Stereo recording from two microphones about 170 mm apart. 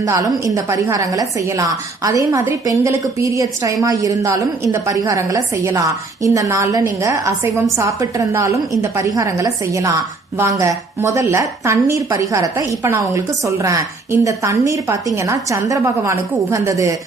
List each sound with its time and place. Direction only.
0.0 s a woman's voice: 20° right (ahead or behind)